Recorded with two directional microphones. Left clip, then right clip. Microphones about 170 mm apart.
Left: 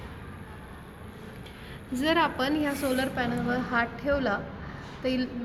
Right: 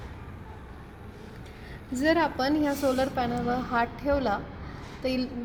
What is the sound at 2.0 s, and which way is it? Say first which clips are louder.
A woman's voice: right 1 dB; 90° right.